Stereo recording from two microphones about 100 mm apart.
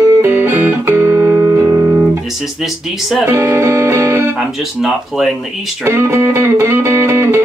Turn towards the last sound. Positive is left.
turn(degrees=-25)  # may be behind; listen again after turning